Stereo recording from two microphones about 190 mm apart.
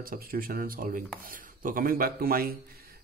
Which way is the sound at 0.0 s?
50° right (ahead or behind).